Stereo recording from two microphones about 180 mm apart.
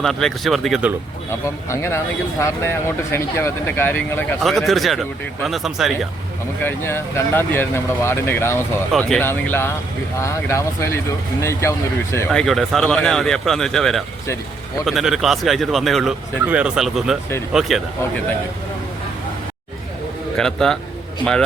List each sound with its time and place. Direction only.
0.0 s speech: centre (ahead or behind)
1.3 s speech: 15° left (ahead or behind)
3.1 s speech: 15° left (ahead or behind)
4.4 s speech: centre (ahead or behind)
6.6 s speech: 10° left (ahead or behind)
12.3 s speech: centre (ahead or behind)
20.3 s a man's voice: 5° left (ahead or behind)